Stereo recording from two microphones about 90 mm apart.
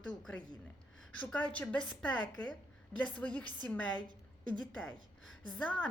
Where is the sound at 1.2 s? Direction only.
15° left (ahead or behind).